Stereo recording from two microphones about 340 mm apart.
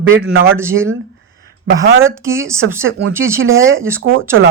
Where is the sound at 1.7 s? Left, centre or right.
Right.